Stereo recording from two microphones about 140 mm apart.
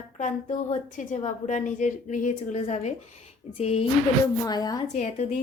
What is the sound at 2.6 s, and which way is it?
Speech, 50° left (ahead or behind).